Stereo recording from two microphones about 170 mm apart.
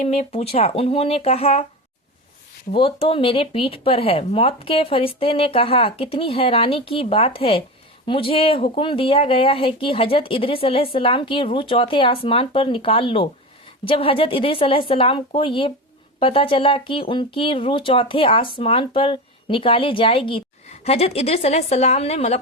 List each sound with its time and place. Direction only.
0.0 s speech: 40° left (ahead or behind)
2.7 s speech: 35° left (ahead or behind)